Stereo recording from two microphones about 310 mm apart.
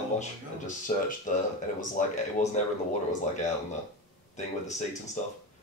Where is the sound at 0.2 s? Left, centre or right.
Left.